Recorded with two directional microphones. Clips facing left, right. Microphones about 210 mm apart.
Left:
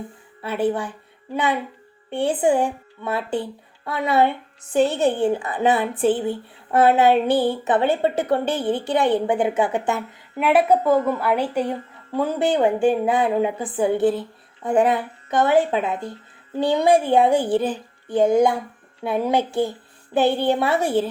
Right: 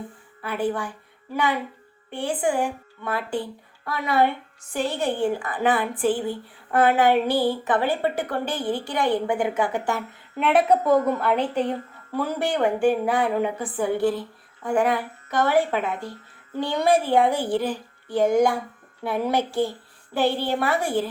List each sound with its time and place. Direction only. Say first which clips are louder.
0.4 s a woman's voice: left 4 dB; 25° left (ahead or behind)
10.4 s a woman's voice: left 2 dB; 5° left (ahead or behind); by 21.1 s 25° left (ahead or behind)